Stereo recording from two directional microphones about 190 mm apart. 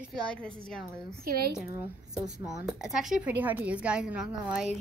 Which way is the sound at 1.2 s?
50° right (ahead or behind).